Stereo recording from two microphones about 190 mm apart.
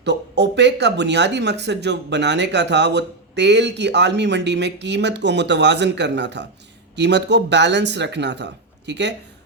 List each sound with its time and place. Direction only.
0.0 s speech: 65° right (ahead or behind)